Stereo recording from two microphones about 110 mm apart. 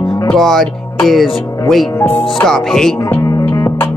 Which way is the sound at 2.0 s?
15° left (ahead or behind).